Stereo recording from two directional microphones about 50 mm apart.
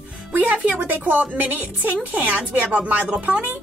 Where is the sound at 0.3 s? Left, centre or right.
Right.